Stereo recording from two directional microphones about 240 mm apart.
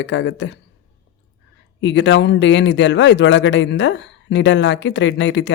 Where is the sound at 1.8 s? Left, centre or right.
Left.